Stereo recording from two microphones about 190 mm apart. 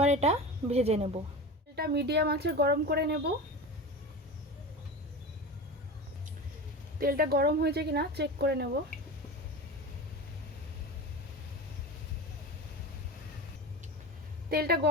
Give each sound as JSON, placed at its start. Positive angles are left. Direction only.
{"t": 0.0, "sound": "a woman's voice", "side_deg": -35}
{"t": 1.7, "sound": "speech", "side_deg": -60}
{"t": 7.0, "sound": "speech", "side_deg": -50}
{"t": 14.5, "sound": "speech", "side_deg": -55}